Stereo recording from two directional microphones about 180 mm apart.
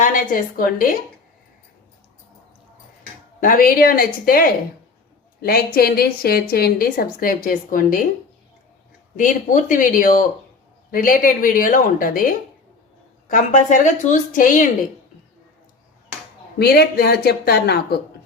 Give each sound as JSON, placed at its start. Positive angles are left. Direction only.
{"t": 0.0, "sound": "a woman's voice", "side_deg": 50}
{"t": 3.4, "sound": "a woman's voice", "side_deg": 50}
{"t": 9.1, "sound": "a woman's voice", "side_deg": 45}
{"t": 16.6, "sound": "a woman's voice", "side_deg": 60}